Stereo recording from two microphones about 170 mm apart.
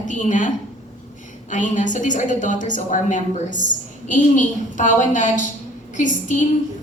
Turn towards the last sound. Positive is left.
turn(degrees=45)  # may be behind; listen again after turning